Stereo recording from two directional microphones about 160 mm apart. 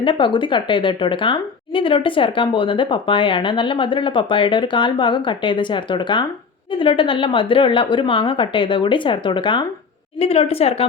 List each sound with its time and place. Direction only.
0.0 s a woman's voice: 30° left (ahead or behind)